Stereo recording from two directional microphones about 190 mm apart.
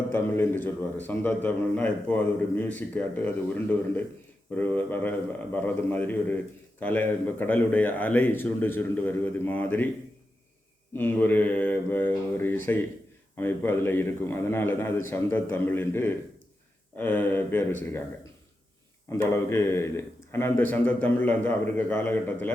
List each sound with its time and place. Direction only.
0.1 s a man's voice: 10° left (ahead or behind)
10.9 s a man's voice: 10° left (ahead or behind)
19.1 s a man's voice: 15° left (ahead or behind)